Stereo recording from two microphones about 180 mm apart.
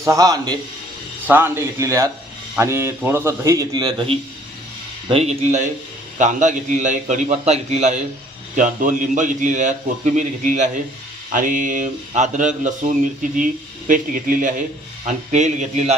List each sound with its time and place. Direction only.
0.0 s a man's voice: 20° right (ahead or behind); by 15.9 s 40° right (ahead or behind)